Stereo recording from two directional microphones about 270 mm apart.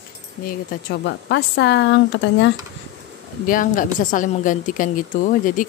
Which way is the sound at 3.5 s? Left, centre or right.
Left.